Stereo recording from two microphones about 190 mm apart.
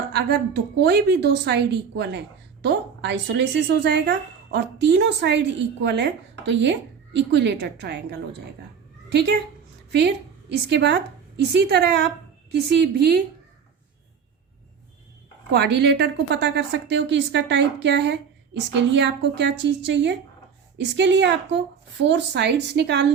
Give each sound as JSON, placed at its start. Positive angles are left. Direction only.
{"t": 0.1, "sound": "a woman's voice", "side_deg": -60}
{"t": 10.7, "sound": "a woman's voice", "side_deg": -65}
{"t": 15.5, "sound": "a woman's voice", "side_deg": -65}